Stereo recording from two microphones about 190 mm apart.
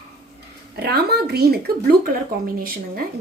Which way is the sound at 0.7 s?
60° right (ahead or behind).